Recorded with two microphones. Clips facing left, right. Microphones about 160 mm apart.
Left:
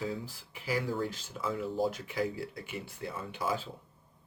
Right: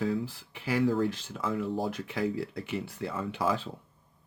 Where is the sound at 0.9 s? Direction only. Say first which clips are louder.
Right 6 dB; 90° right.